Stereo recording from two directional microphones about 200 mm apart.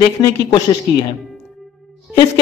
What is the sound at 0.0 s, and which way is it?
Speech, 25° left (ahead or behind).